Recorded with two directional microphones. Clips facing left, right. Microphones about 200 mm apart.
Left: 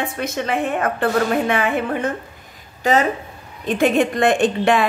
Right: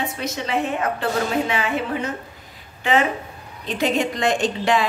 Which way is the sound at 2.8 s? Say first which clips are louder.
Left 3 dB; 40° left (ahead or behind).